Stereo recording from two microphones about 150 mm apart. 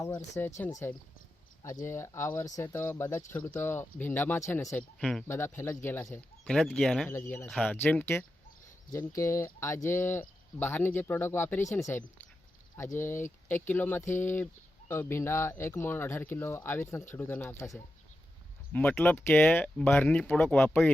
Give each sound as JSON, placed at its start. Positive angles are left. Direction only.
{"t": 0.0, "sound": "speech", "side_deg": 20}
{"t": 4.8, "sound": "speech", "side_deg": 5}
{"t": 5.3, "sound": "speech", "side_deg": 15}
{"t": 6.4, "sound": "speech", "side_deg": 5}
{"t": 7.1, "sound": "speech", "side_deg": 15}
{"t": 7.4, "sound": "speech", "side_deg": 5}